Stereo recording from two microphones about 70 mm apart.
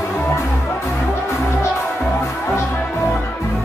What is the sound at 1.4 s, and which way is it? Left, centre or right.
Music, left.